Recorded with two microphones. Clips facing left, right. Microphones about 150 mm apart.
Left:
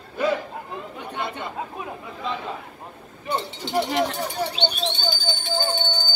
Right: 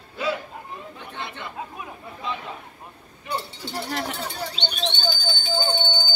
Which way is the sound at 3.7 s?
20° left (ahead or behind).